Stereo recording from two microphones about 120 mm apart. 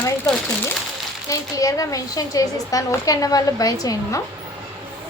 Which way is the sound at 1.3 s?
30° left (ahead or behind).